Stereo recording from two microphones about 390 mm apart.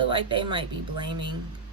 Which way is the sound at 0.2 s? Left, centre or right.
Centre.